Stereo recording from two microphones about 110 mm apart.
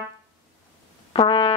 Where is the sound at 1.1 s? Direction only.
45° left (ahead or behind).